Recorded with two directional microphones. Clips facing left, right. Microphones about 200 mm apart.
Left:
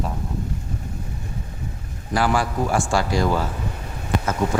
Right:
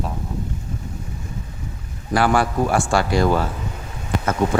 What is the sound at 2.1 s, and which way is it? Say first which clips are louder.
Speech: right 3 dB; 60° right (ahead or behind).